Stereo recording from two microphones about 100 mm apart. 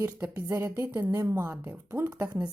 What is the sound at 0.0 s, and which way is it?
Speech, 25° right (ahead or behind).